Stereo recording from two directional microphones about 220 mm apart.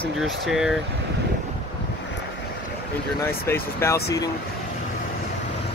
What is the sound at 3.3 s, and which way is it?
Speech, 10° left (ahead or behind).